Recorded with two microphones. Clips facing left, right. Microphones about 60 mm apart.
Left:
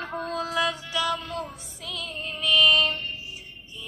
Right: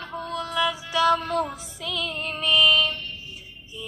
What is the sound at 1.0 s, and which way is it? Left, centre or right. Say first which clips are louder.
Music: right 11 dB; right.